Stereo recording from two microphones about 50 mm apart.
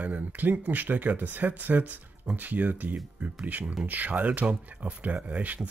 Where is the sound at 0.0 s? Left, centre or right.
Right.